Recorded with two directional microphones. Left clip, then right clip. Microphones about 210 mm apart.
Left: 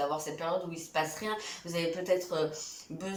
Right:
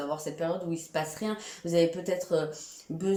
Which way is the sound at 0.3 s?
30° right (ahead or behind).